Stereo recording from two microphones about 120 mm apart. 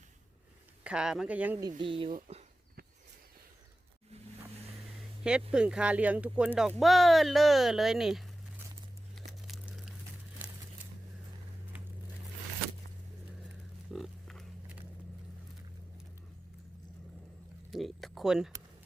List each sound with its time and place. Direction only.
0.9 s speech: 5° right (ahead or behind)
1.8 s speech: 45° right (ahead or behind)
5.5 s speech: 5° right (ahead or behind)
9.5 s a sound: centre (ahead or behind)
13.9 s pig: centre (ahead or behind)
17.7 s a sound: centre (ahead or behind)